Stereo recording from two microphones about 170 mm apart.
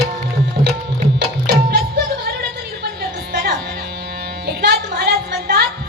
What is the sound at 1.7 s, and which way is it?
Music, 75° right (ahead or behind).